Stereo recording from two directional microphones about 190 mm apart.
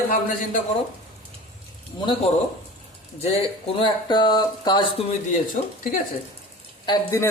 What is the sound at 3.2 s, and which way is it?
Speech, 30° left (ahead or behind).